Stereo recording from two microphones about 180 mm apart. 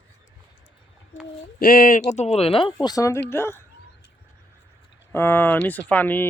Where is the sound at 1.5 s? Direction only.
50° left (ahead or behind); by 2.7 s 30° left (ahead or behind).